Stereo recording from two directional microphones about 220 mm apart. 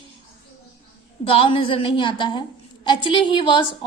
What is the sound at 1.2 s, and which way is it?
A woman's voice, 25° left (ahead or behind).